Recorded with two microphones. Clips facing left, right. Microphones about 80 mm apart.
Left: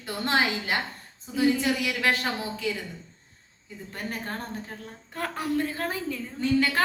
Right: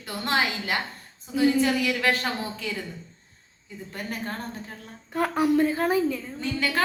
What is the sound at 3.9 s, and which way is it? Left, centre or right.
Speech, left.